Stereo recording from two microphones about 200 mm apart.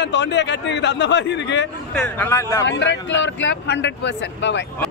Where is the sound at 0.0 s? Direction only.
60° left (ahead or behind).